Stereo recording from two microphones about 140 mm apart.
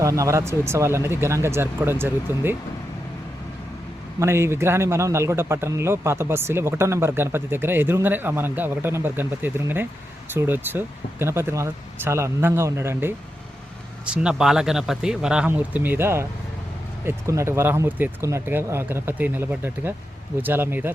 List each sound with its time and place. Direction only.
0.0 s speech: 25° right (ahead or behind)
4.2 s a man's voice: 20° right (ahead or behind)
14.0 s a man's voice: 5° right (ahead or behind)